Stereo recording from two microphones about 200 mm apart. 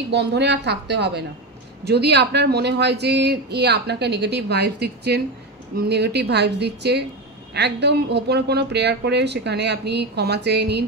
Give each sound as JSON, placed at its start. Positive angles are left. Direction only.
{"t": 0.1, "sound": "speech", "side_deg": -60}